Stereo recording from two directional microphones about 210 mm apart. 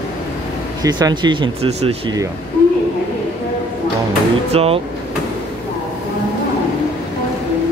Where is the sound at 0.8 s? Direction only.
20° right (ahead or behind).